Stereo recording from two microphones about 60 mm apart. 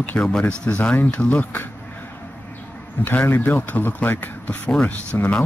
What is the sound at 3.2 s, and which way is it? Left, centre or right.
Speech, left.